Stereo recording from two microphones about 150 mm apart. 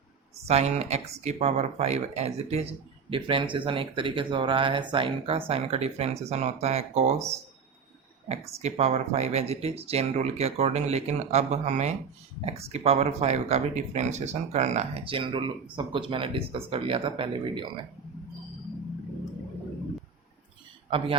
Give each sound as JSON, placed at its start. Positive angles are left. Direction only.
{"t": 0.4, "sound": "speech", "side_deg": -45}
{"t": 8.3, "sound": "speech", "side_deg": -45}